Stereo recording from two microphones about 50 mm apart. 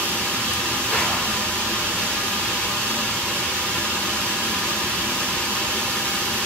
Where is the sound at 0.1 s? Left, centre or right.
Centre.